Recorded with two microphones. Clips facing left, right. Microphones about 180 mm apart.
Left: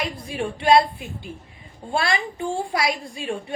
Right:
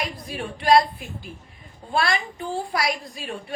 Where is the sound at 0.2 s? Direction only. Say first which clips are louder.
Left 4 dB; 25° left (ahead or behind).